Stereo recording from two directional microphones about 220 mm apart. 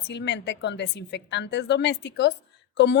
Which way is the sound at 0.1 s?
50° left (ahead or behind).